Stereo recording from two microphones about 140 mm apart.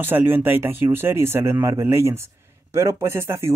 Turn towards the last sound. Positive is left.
turn(degrees=-20)  # may be behind; listen again after turning